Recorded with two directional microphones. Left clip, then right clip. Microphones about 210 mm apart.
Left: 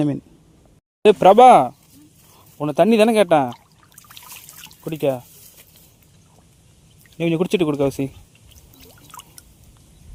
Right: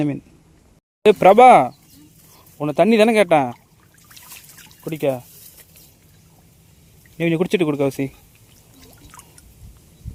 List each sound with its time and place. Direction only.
1.0 s speech: centre (ahead or behind)
4.1 s trickle: 30° left (ahead or behind)
4.8 s a sound: centre (ahead or behind)
7.2 s speech: centre (ahead or behind)